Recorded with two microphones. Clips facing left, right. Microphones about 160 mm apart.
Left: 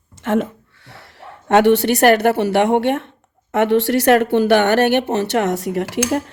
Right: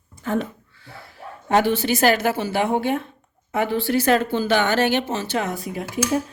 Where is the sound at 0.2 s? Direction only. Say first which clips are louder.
Left 5 dB; 90° left.